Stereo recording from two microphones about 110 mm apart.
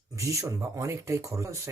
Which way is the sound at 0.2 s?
30° right (ahead or behind).